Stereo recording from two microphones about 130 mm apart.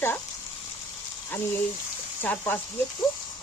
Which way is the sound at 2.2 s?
15° left (ahead or behind).